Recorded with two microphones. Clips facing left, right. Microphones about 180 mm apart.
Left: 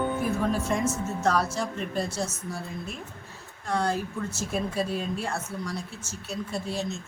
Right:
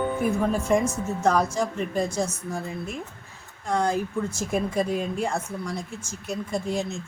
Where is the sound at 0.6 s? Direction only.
15° right (ahead or behind).